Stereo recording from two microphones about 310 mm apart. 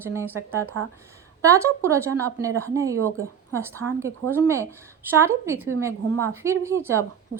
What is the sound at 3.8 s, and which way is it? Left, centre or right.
Speech, right.